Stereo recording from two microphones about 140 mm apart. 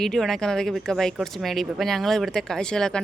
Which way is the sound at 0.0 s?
Centre (ahead or behind).